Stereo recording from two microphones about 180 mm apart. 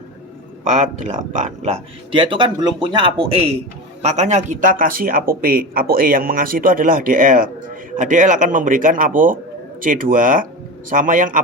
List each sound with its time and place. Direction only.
0.6 s speech: 40° right (ahead or behind)